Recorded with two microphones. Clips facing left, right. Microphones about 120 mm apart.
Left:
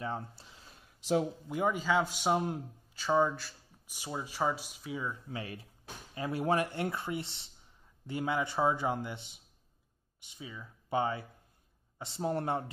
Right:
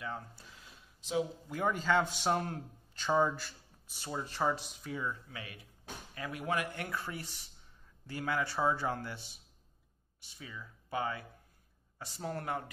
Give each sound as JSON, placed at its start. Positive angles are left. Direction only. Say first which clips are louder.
{"t": 0.0, "sound": "speech", "louder": "left 4 dB", "side_deg": 30}
{"t": 1.5, "sound": "a man's voice", "louder": "left 1 dB", "side_deg": 10}
{"t": 3.9, "sound": "a man's voice", "louder": "even", "side_deg": 10}
{"t": 5.3, "sound": "speech", "louder": "left 7 dB", "side_deg": 30}